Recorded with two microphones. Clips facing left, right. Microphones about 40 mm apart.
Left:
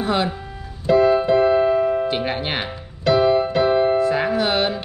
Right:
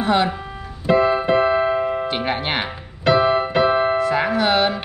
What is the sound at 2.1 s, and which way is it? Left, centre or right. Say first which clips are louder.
Speech: right 1 dB; right.